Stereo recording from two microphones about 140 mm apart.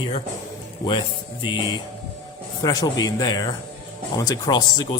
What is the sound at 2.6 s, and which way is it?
Speech, 25° left (ahead or behind).